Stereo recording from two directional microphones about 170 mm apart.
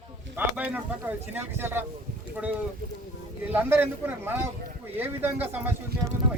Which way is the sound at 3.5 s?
10° right (ahead or behind).